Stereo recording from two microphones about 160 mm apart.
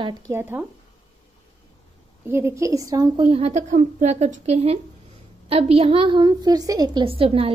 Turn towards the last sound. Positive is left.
turn(degrees=-35)  # may be behind; listen again after turning